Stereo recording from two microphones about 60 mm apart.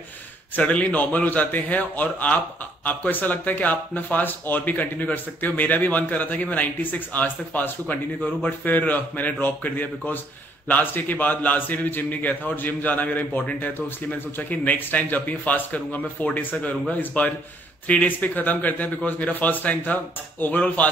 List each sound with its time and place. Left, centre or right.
0.6 s a man's voice: left